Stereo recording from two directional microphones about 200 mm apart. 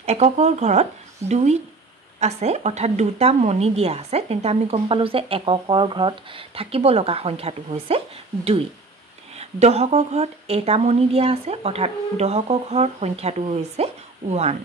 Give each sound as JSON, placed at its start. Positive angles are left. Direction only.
{"t": 0.0, "sound": "speech", "side_deg": -35}
{"t": 9.4, "sound": "speech", "side_deg": -30}